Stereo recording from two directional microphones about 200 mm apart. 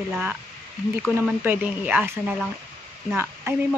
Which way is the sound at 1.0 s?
5° right (ahead or behind).